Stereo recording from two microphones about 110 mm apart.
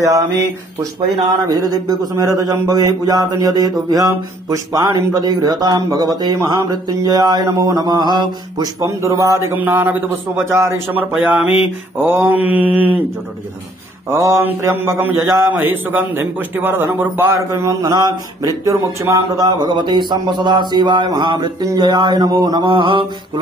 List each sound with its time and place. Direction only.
1.5 s a man's voice: 35° right (ahead or behind)
8.8 s a man's voice: 30° right (ahead or behind)
12.0 s a sound: 15° right (ahead or behind)
14.1 s a man's voice: 30° right (ahead or behind); by 23.4 s 50° right (ahead or behind)